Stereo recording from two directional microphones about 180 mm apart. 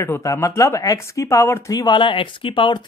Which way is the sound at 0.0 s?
15° left (ahead or behind).